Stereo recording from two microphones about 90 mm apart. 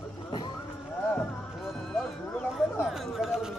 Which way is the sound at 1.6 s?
5° left (ahead or behind).